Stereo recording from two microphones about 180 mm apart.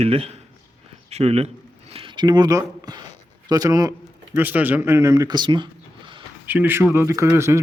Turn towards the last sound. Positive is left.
turn(degrees=-15)  # may be behind; listen again after turning